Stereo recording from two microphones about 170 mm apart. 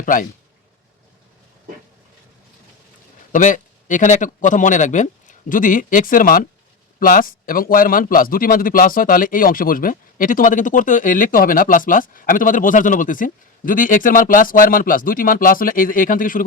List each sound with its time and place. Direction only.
0.0 s speech: 55° left (ahead or behind)
3.3 s speech: 50° left (ahead or behind)